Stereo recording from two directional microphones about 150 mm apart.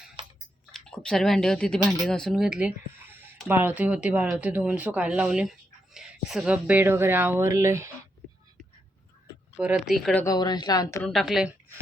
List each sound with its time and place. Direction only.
0.2 s a sound: 35° right (ahead or behind)
0.7 s speech: 5° left (ahead or behind); by 7.9 s 20° right (ahead or behind)
9.8 s a woman's voice: 5° left (ahead or behind)
10.2 s speech: 30° left (ahead or behind)
11.0 s a woman's voice: centre (ahead or behind)